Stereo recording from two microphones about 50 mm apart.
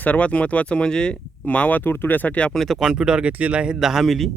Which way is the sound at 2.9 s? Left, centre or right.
Centre.